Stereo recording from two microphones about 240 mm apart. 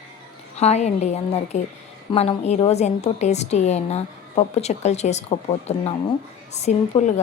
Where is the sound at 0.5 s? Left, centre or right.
Left.